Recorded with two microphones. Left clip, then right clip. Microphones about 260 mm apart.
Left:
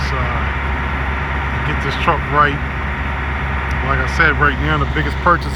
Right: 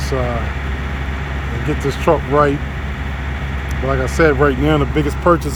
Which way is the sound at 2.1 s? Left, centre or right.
Right.